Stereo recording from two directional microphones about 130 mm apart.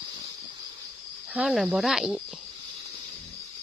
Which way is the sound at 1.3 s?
5° right (ahead or behind).